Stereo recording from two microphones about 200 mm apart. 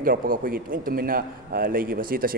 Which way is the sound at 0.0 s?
45° right (ahead or behind).